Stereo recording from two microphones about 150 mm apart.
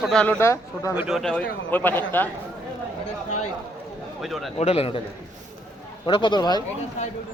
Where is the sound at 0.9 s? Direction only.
Centre (ahead or behind).